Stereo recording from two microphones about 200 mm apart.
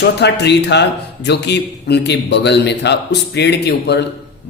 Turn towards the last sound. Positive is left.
turn(degrees=55)  # may be behind; listen again after turning